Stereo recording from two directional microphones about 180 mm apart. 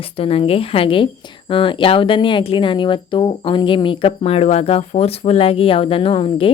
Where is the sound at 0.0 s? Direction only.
30° left (ahead or behind).